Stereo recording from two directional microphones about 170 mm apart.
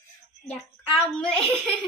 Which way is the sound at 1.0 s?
35° left (ahead or behind).